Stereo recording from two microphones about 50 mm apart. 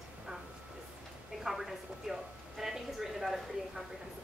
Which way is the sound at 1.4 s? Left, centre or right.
Centre.